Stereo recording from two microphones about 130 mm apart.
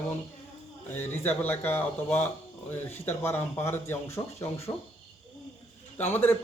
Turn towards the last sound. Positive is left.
turn(degrees=15)  # may be behind; listen again after turning